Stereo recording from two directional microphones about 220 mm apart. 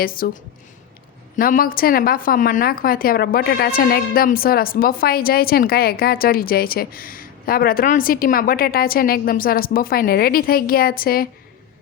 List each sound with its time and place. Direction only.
0.0 s a woman's voice: 40° left (ahead or behind)
1.4 s a woman's voice: 40° left (ahead or behind)